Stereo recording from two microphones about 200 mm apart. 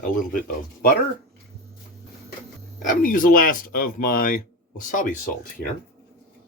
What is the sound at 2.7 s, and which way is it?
Speech, 45° left (ahead or behind).